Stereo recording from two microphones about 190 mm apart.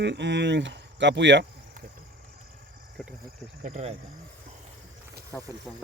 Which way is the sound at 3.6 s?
40° right (ahead or behind).